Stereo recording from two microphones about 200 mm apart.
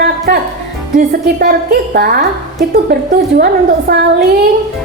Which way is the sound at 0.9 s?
50° right (ahead or behind).